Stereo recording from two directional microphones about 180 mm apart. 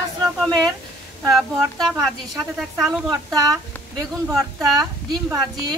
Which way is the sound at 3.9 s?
20° right (ahead or behind).